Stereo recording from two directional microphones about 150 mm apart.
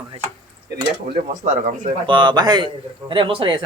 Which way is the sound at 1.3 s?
60° right (ahead or behind).